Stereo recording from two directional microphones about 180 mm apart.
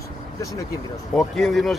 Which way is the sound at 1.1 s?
Centre (ahead or behind).